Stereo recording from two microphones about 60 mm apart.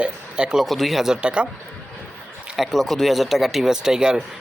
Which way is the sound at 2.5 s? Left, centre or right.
Centre.